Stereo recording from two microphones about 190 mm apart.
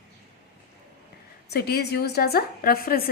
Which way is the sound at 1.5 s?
60° left (ahead or behind).